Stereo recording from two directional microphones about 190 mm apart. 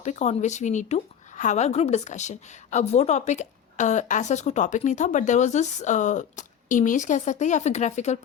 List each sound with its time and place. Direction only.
0.0 s speech: 35° left (ahead or behind)